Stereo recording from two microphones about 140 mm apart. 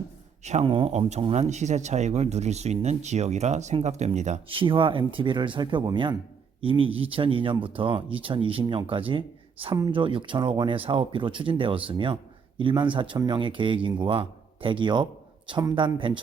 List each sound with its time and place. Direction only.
0.4 s speech: 50° right (ahead or behind)
4.4 s speech: 40° right (ahead or behind)